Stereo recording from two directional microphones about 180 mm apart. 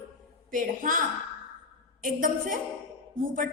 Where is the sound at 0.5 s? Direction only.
45° right (ahead or behind).